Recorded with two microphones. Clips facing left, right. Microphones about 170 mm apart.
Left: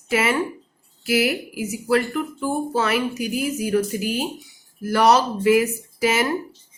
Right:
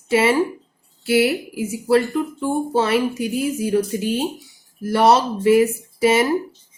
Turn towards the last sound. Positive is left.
turn(degrees=-30)  # may be behind; listen again after turning